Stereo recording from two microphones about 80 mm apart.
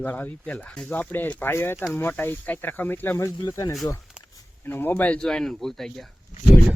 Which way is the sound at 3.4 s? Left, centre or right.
Left.